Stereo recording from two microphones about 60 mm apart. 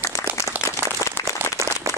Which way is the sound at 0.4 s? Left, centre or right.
Right.